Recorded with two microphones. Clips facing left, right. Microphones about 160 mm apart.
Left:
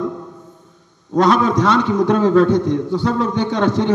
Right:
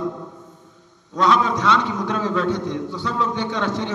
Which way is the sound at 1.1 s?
45° left (ahead or behind).